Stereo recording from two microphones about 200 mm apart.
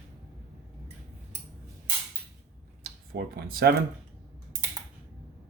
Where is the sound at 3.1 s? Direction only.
50° right (ahead or behind).